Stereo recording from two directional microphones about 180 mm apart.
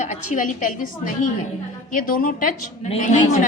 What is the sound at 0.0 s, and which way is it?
A woman's voice, 45° left (ahead or behind).